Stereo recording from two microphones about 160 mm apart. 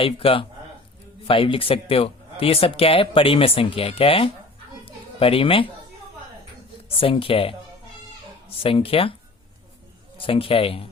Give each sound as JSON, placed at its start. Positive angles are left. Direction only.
{"t": 0.0, "sound": "speech", "side_deg": 35}
{"t": 6.9, "sound": "speech", "side_deg": 35}
{"t": 10.2, "sound": "speech", "side_deg": 35}